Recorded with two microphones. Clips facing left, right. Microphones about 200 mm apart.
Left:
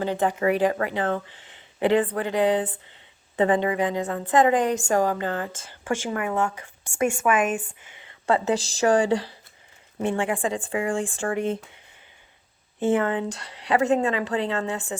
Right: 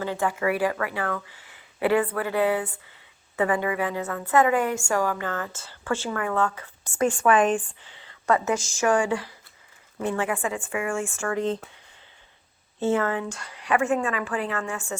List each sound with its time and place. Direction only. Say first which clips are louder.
0.0 s speech: left 3 dB; 20° left (ahead or behind)
7.6 s a sound: left 4 dB; 20° left (ahead or behind)
8.4 s speech: left 2 dB; 35° left (ahead or behind)
11.3 s speech: even; 10° left (ahead or behind)
12.8 s speech: left 2 dB; 20° left (ahead or behind)
13.2 s speech: left 2 dB; 35° left (ahead or behind); by 14.9 s 20° left (ahead or behind)